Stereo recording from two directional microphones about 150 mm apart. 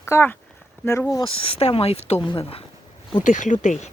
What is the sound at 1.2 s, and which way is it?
Speech, 40° left (ahead or behind).